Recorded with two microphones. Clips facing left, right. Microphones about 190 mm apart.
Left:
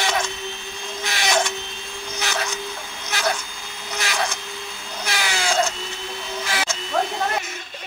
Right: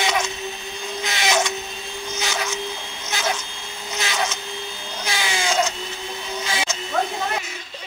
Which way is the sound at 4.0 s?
25° right (ahead or behind).